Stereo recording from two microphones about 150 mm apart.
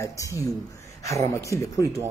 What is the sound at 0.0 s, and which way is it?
Speech, 20° left (ahead or behind).